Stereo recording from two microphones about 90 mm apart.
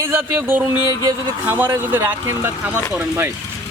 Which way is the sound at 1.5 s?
25° right (ahead or behind).